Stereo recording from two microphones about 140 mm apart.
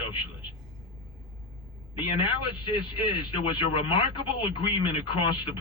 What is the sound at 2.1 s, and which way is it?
Speech, 35° left (ahead or behind).